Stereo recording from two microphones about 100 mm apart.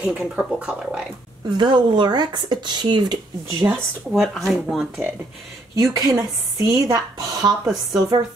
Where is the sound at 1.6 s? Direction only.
50° right (ahead or behind).